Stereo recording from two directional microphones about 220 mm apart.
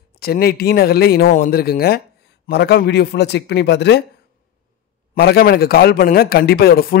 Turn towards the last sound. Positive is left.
turn(degrees=45)  # may be behind; listen again after turning